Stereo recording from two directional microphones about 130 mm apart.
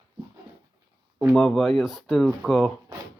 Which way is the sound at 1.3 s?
5° left (ahead or behind).